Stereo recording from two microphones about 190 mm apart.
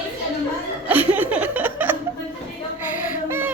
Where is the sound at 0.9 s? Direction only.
10° right (ahead or behind).